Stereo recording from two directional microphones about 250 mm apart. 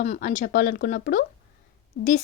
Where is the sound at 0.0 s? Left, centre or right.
Left.